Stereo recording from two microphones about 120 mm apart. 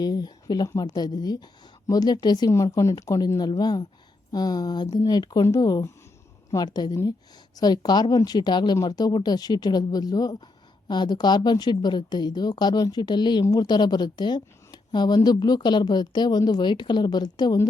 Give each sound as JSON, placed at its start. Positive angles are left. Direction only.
{"t": 0.0, "sound": "a woman's voice", "side_deg": 35}